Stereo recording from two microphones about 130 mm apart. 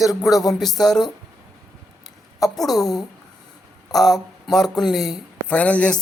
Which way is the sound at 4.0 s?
5° left (ahead or behind).